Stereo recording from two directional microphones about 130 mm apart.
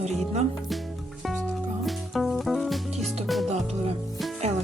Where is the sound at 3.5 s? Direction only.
55° right (ahead or behind).